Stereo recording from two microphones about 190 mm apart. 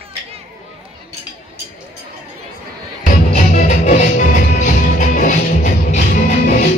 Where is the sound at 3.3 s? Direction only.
35° left (ahead or behind).